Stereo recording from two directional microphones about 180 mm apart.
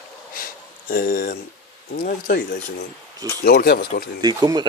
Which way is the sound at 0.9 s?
50° left (ahead or behind).